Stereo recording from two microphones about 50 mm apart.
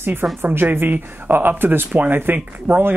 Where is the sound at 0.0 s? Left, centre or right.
Right.